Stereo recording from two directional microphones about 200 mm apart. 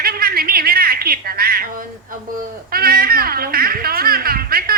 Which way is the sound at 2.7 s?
50° right (ahead or behind).